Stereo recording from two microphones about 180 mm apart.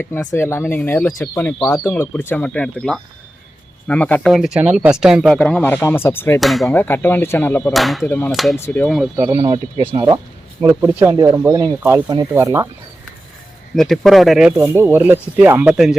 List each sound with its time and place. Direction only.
0.0 s speech: 10° left (ahead or behind)
6.4 s speech: centre (ahead or behind)
6.7 s speech: 10° left (ahead or behind)
7.7 s speech: centre (ahead or behind)
8.5 s speech: 10° left (ahead or behind)
9.2 s speech: 25° right (ahead or behind)
10.8 s speech: 15° right (ahead or behind)
13.7 s speech: centre (ahead or behind)